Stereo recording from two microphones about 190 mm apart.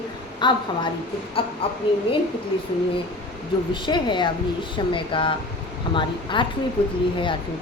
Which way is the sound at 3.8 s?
25° left (ahead or behind).